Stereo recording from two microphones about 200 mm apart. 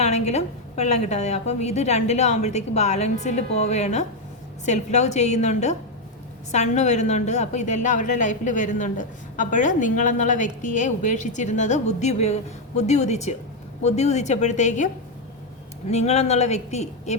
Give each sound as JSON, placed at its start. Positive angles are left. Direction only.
{"t": 0.0, "sound": "a woman's voice", "side_deg": 35}
{"t": 15.9, "sound": "a woman's voice", "side_deg": 35}